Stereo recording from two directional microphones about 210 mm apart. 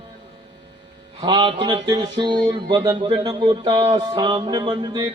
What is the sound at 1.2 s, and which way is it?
A man's voice, 20° right (ahead or behind).